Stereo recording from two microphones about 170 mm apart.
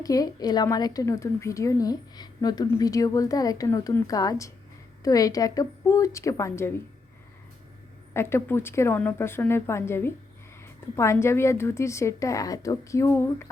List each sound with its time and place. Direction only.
0.0 s a woman's voice: 20° left (ahead or behind)
8.1 s a woman's voice: 15° left (ahead or behind)